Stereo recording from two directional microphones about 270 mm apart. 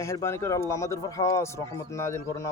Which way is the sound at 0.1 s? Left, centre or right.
Centre.